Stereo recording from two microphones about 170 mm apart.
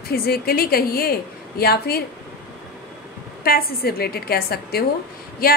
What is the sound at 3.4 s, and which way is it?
A woman's voice, 65° left (ahead or behind).